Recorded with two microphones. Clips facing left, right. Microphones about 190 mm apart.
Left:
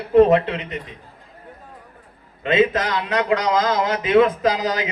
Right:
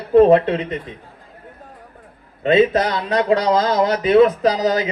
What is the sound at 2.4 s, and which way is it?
A man's voice, 35° right (ahead or behind).